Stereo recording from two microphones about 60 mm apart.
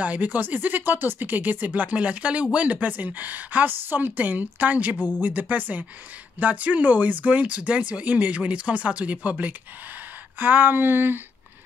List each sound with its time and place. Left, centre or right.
0.0 s speech: right
4.9 s speech: centre
5.2 s speech: right